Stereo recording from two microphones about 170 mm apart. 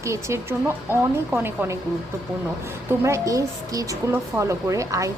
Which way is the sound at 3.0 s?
15° right (ahead or behind).